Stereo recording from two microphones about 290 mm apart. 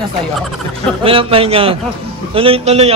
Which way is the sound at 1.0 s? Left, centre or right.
Centre.